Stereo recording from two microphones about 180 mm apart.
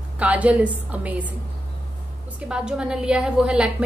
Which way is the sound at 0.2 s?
10° right (ahead or behind).